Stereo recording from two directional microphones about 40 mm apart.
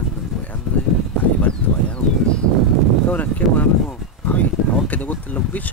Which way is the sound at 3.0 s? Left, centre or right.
Left.